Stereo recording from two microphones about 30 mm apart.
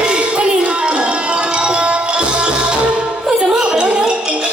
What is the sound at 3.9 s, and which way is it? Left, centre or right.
Music, right.